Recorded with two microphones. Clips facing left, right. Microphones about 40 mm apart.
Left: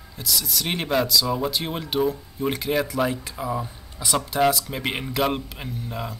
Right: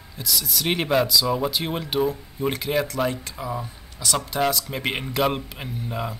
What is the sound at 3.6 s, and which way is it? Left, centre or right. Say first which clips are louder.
Speech: right 1 dB; centre.